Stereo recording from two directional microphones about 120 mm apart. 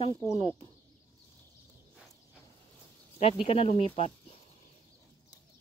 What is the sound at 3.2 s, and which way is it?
Speech, 55° left (ahead or behind).